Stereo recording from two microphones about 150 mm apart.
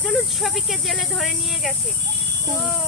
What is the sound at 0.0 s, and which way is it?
Speech, centre (ahead or behind).